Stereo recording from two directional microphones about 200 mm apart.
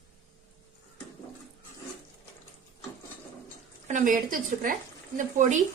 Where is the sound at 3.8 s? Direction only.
40° right (ahead or behind).